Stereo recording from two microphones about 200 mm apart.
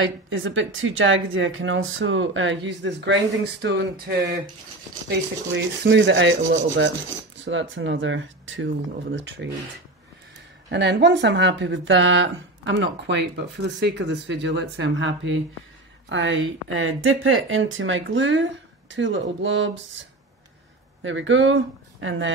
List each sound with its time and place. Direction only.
0.0 s speech: 75° right (ahead or behind)
3.6 s speech: 55° right (ahead or behind)
5.0 s speech: 65° right (ahead or behind)
10.7 s speech: 60° right (ahead or behind)